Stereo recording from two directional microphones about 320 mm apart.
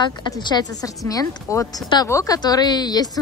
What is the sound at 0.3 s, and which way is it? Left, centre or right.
A woman's voice, centre.